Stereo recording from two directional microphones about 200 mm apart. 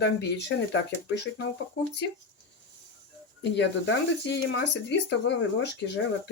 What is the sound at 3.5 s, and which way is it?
Speech, 60° left (ahead or behind).